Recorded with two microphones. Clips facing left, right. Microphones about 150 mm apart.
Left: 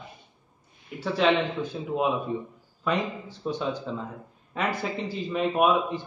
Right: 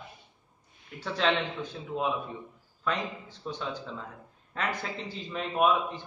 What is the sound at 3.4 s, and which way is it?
A man's voice, 15° left (ahead or behind).